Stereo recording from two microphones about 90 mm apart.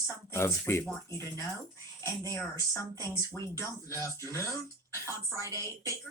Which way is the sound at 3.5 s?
30° left (ahead or behind).